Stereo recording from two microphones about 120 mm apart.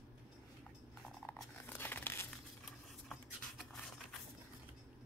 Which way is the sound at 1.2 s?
15° left (ahead or behind).